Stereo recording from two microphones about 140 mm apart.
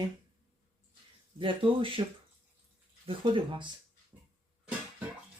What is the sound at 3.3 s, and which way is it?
Speech, 35° right (ahead or behind).